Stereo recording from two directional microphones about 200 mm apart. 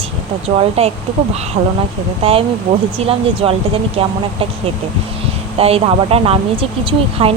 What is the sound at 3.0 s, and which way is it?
Speech, 30° right (ahead or behind).